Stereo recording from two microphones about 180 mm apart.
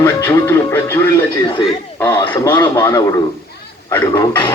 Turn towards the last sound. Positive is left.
turn(degrees=20)  # may be behind; listen again after turning